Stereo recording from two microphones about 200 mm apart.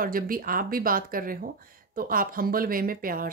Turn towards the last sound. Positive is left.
turn(degrees=-45)  # may be behind; listen again after turning